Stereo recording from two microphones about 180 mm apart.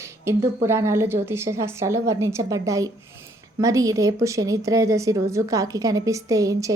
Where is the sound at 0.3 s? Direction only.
15° right (ahead or behind).